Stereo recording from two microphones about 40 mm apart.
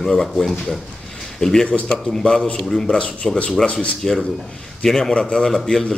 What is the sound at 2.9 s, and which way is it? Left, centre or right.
Speech, left.